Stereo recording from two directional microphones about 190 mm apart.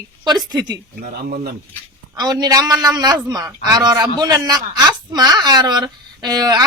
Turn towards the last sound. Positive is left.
turn(degrees=-20)  # may be behind; listen again after turning